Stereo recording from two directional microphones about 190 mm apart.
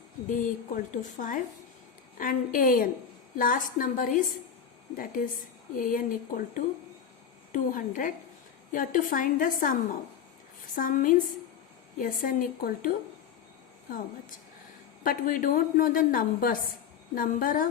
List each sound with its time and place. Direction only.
0.3 s a woman's voice: 45° left (ahead or behind)
10.8 s a woman's voice: 45° left (ahead or behind)
15.0 s a woman's voice: 45° left (ahead or behind)